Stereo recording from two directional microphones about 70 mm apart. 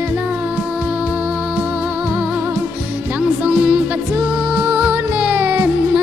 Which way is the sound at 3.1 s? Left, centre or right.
Centre.